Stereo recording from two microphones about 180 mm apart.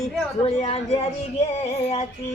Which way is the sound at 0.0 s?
35° left (ahead or behind).